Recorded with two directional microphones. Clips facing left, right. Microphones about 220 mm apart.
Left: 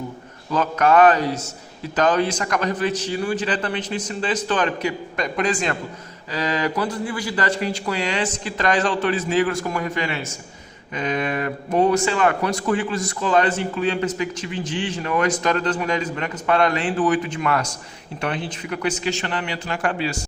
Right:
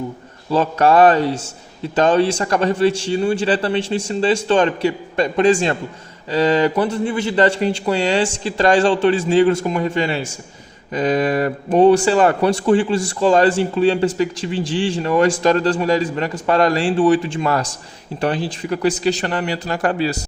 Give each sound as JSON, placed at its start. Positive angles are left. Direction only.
{"t": 0.5, "sound": "a man's voice", "side_deg": -30}